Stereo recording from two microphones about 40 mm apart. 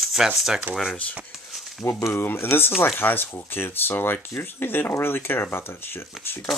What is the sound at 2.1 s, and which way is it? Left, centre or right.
Speech, left.